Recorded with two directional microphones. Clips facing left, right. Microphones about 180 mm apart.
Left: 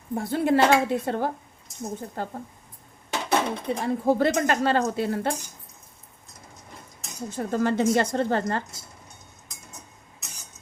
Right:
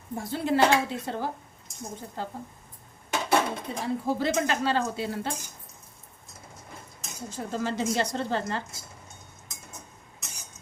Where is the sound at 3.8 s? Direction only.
55° left (ahead or behind).